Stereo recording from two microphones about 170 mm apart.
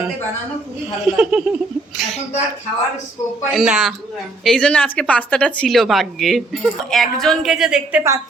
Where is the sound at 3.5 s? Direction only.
Centre (ahead or behind).